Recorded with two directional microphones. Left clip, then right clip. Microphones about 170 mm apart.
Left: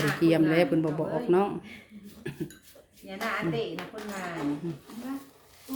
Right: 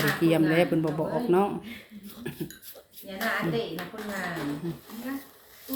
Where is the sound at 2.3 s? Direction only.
5° left (ahead or behind).